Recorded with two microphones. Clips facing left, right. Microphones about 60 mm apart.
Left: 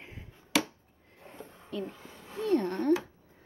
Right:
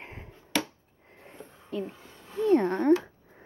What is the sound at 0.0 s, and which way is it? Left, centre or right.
Chop, right.